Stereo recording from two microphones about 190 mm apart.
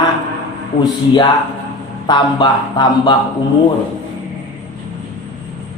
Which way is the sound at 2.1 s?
20° left (ahead or behind).